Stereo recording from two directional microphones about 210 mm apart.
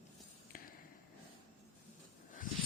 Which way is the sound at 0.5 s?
45° left (ahead or behind).